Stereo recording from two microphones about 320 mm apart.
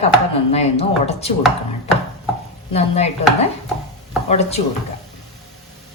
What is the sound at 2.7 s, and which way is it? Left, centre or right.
Speech, centre.